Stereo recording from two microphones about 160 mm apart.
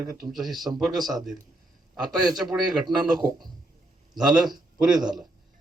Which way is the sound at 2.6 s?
25° right (ahead or behind).